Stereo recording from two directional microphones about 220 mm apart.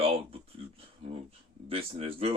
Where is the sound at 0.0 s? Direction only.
25° right (ahead or behind).